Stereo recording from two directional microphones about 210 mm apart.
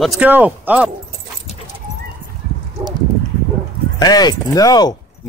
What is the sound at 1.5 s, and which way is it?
Dog, 30° left (ahead or behind).